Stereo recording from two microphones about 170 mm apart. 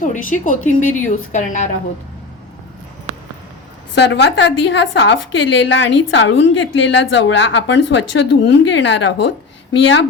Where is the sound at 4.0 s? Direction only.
85° left.